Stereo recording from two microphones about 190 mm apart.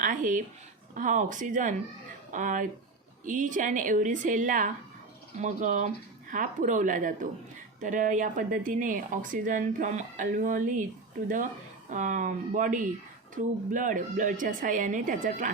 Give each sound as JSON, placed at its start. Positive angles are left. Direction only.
{"t": 0.0, "sound": "a sound", "side_deg": -45}
{"t": 0.9, "sound": "speech", "side_deg": -40}
{"t": 11.9, "sound": "speech", "side_deg": -40}